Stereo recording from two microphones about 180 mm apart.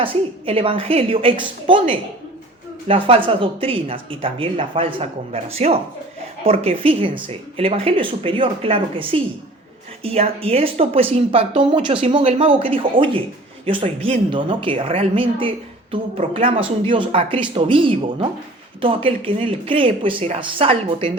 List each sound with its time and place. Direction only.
0.0 s speech: 30° right (ahead or behind)
2.8 s speech: 30° right (ahead or behind)